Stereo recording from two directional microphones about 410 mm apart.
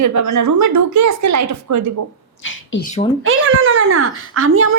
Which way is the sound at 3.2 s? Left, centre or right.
Right.